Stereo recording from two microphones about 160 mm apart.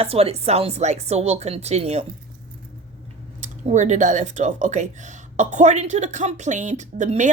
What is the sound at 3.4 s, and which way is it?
Speech, 50° right (ahead or behind).